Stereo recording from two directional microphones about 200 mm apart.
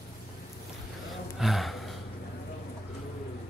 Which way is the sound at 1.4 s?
Centre (ahead or behind).